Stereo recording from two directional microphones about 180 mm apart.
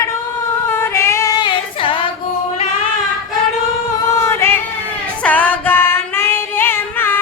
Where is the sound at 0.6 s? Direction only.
15° left (ahead or behind).